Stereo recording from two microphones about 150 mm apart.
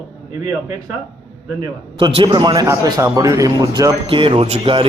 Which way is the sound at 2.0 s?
35° right (ahead or behind).